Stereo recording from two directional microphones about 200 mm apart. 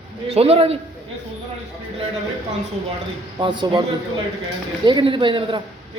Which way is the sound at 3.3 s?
20° right (ahead or behind).